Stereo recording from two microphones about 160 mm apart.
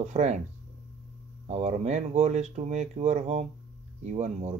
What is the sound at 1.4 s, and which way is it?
Speech, 45° right (ahead or behind).